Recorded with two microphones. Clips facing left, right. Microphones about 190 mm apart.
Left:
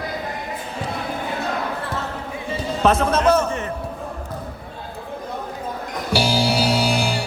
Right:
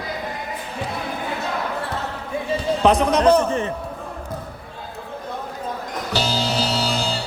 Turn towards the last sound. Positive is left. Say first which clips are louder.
# left 3 dB
turn(degrees=15)  # may be behind; listen again after turning